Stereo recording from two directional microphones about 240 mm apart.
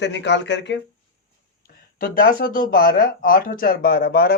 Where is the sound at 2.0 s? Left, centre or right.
Left.